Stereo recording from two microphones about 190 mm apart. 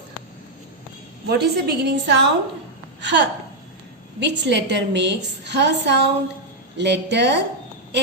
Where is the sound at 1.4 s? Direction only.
60° right (ahead or behind).